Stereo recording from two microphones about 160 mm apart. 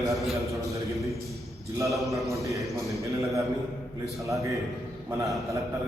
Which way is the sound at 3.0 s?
20° right (ahead or behind).